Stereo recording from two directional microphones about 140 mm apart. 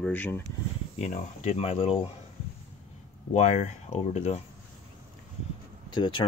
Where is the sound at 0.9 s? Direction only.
55° left (ahead or behind).